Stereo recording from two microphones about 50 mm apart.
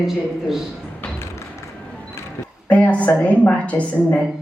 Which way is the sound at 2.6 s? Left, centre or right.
Left.